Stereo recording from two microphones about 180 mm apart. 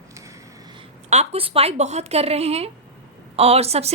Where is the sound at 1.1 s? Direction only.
35° right (ahead or behind).